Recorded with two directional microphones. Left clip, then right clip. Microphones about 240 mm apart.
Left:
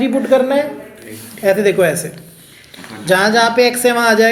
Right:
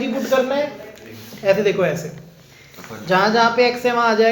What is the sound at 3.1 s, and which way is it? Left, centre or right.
A woman's voice, left.